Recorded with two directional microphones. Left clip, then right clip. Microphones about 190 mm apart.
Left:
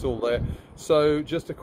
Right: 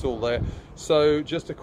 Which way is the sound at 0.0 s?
40° left (ahead or behind).